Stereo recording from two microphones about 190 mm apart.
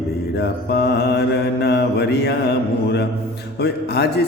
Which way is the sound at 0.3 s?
60° left (ahead or behind).